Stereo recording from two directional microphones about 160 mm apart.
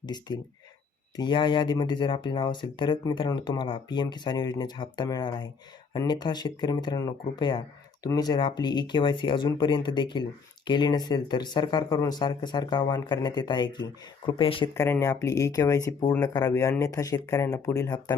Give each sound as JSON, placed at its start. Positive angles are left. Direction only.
{"t": 0.0, "sound": "speech", "side_deg": 25}
{"t": 14.8, "sound": "speech", "side_deg": 15}